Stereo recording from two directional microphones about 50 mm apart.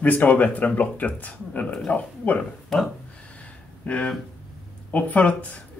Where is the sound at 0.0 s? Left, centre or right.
Left.